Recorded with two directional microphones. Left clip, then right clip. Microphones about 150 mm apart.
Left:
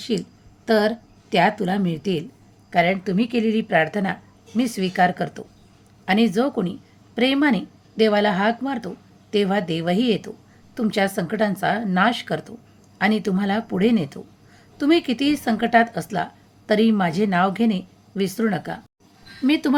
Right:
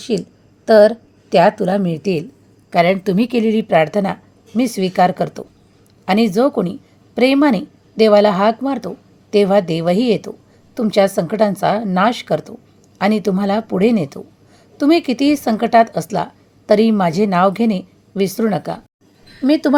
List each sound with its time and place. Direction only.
0.0 s a woman's voice: 20° right (ahead or behind)
2.6 s a woman's voice: 40° right (ahead or behind); by 19.7 s 25° right (ahead or behind)